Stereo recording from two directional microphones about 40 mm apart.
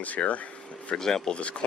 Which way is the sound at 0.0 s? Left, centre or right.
Left.